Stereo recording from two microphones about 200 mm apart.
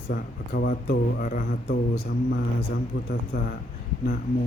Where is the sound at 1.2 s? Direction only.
40° left (ahead or behind).